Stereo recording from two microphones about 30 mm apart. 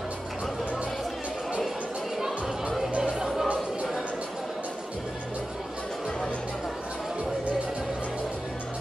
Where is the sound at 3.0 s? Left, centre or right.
Right.